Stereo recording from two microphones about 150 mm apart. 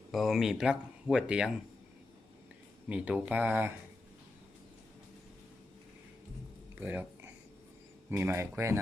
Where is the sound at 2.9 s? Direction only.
10° right (ahead or behind).